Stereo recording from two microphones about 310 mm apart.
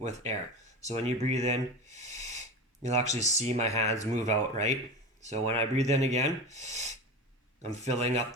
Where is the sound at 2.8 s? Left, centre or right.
Right.